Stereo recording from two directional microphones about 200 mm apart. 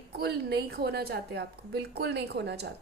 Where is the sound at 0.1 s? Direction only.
55° right (ahead or behind).